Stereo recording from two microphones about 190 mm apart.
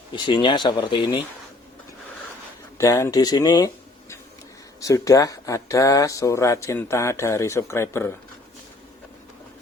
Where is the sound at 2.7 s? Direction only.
15° left (ahead or behind).